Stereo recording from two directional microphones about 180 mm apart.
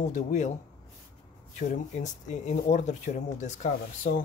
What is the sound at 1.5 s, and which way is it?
Speech, 40° left (ahead or behind).